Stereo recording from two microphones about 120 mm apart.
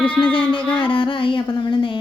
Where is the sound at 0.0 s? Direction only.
45° left (ahead or behind).